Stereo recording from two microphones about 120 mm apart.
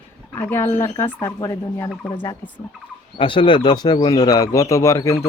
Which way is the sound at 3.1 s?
45° left (ahead or behind).